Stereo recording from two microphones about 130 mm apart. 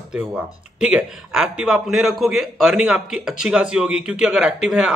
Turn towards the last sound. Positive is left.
turn(degrees=-5)  # may be behind; listen again after turning